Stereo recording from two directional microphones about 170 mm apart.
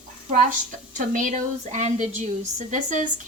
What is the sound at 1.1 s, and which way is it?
A woman's voice, 50° right (ahead or behind).